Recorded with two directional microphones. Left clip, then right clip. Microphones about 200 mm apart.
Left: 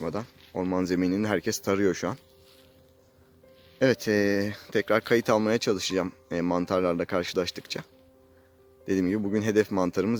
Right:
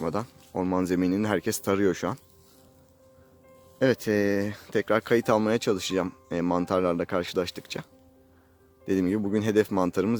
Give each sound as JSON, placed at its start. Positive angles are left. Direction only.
{"t": 0.0, "sound": "speech", "side_deg": -15}
{"t": 3.8, "sound": "speech", "side_deg": 0}
{"t": 8.9, "sound": "speech", "side_deg": -5}